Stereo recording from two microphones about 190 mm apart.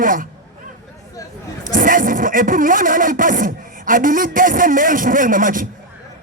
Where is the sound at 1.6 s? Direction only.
45° right (ahead or behind).